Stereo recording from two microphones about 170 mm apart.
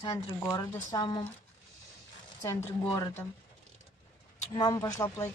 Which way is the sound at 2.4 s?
15° left (ahead or behind).